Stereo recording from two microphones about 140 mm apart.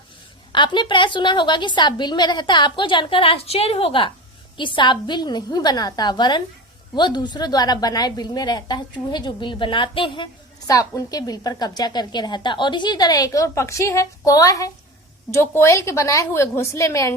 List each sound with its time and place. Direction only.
0.5 s a woman's voice: 35° left (ahead or behind)
10.7 s a woman's voice: 25° left (ahead or behind)